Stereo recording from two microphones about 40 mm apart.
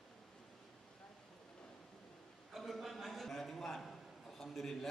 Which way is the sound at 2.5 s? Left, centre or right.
Centre.